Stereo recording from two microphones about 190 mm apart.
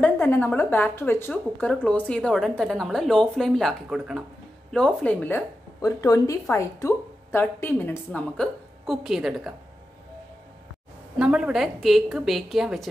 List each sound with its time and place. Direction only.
0.0 s a woman's voice: 10° left (ahead or behind)
11.1 s a woman's voice: 5° right (ahead or behind)